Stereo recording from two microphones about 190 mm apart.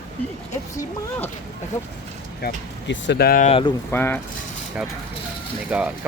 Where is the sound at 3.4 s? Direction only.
30° left (ahead or behind).